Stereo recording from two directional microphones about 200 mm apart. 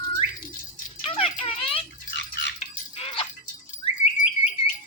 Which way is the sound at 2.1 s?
60° left (ahead or behind).